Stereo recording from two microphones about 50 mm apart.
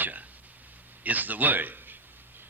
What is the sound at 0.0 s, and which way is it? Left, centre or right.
Throat clearing, right.